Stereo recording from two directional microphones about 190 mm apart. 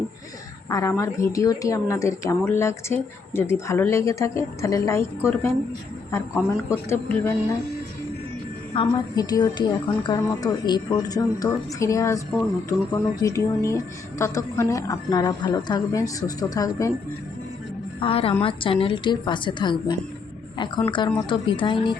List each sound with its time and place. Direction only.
0.7 s speech: 15° left (ahead or behind)
6.7 s speech: 15° left (ahead or behind)
8.7 s a woman's voice: 25° left (ahead or behind)
18.0 s a woman's voice: 30° left (ahead or behind)
21.2 s a woman's voice: 25° left (ahead or behind)